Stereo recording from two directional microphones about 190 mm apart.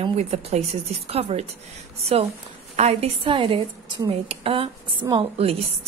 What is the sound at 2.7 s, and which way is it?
A woman's voice, 35° right (ahead or behind).